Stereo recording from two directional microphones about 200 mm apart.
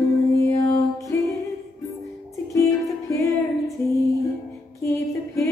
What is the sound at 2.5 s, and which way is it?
Music, 15° left (ahead or behind).